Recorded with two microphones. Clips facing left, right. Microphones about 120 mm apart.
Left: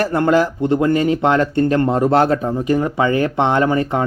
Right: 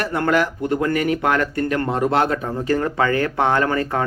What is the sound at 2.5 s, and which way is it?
Speech, 15° left (ahead or behind).